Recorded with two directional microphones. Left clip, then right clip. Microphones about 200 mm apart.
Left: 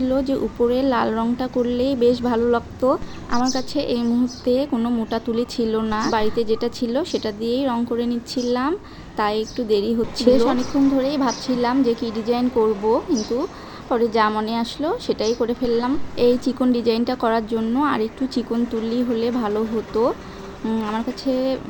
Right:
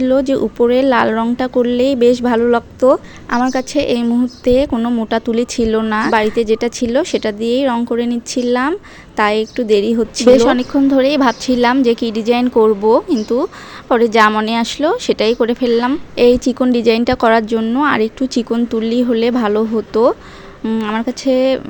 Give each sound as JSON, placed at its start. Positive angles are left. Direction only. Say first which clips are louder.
{"t": 0.0, "sound": "speech", "louder": "right 7 dB", "side_deg": -40}